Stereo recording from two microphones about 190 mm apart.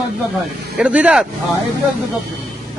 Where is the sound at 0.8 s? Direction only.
5° right (ahead or behind).